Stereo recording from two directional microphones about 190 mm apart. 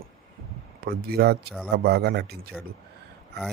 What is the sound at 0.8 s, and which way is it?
Speech, 55° right (ahead or behind).